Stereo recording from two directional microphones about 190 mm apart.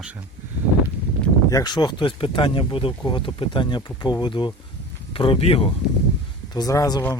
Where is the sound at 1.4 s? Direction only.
20° left (ahead or behind).